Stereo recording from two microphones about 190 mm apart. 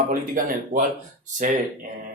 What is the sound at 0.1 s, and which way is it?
Speech, 45° right (ahead or behind).